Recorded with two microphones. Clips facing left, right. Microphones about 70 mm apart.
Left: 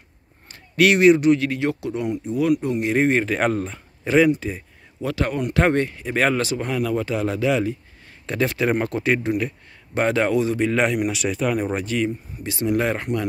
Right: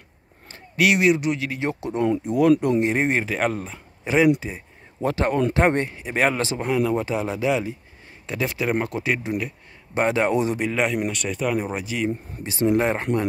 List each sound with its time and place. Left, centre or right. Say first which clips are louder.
0.7 s speech: left 4 dB; centre
1.6 s speech: left 3 dB; right
2.2 s speech: right 2 dB; right
2.8 s speech: left 2 dB; right
3.3 s speech: left 3 dB; centre
5.0 s speech: right 3 dB; right; by 9.5 s centre
9.9 s speech: left 1 dB; centre
10.6 s speech: left 3 dB; centre
11.1 s speech: left 2 dB; centre
12.4 s speech: right 1 dB; right